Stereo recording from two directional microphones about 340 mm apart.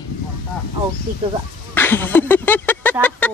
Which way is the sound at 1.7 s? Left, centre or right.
Centre.